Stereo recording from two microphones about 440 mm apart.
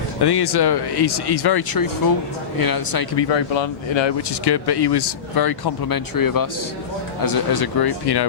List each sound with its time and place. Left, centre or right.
0.2 s speech: left
3.2 s speech: left